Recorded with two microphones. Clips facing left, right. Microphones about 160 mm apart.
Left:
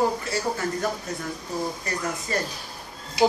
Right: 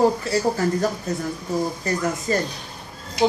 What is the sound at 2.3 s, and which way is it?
Speech, 35° right (ahead or behind).